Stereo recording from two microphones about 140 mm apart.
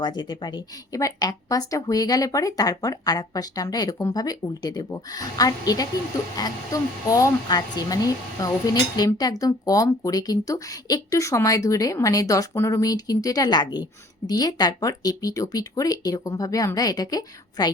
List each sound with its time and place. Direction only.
0.0 s speech: 30° left (ahead or behind)